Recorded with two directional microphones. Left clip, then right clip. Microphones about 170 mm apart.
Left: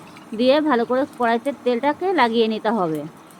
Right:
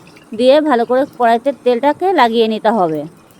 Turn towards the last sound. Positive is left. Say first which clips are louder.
# right 8 dB
turn(degrees=-50)  # may be behind; listen again after turning